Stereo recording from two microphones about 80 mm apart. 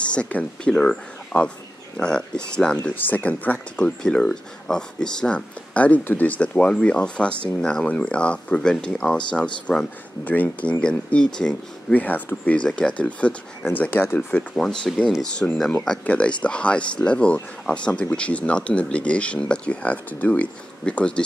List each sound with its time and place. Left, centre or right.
0.0 s speech: centre
11.9 s speech: left
13.7 s speech: left
14.3 s speech: centre